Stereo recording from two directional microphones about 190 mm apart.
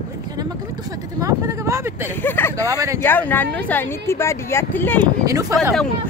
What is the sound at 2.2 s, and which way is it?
Speech, 10° left (ahead or behind).